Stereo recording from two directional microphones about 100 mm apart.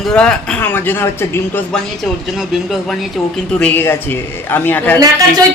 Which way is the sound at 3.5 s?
15° left (ahead or behind).